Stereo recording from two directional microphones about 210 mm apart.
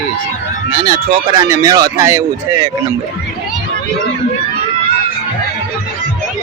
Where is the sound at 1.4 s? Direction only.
15° right (ahead or behind).